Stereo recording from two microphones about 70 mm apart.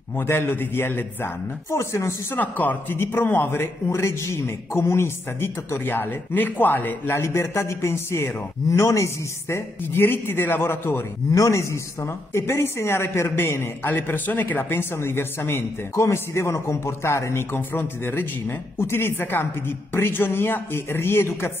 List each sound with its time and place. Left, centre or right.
0.3 s a man's voice: left
2.4 s a man's voice: left
8.6 s speech: left
9.9 s a man's voice: left
11.3 s a man's voice: left
15.9 s a man's voice: left